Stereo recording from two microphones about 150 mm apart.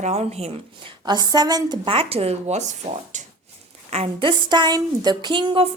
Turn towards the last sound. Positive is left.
turn(degrees=-35)  # may be behind; listen again after turning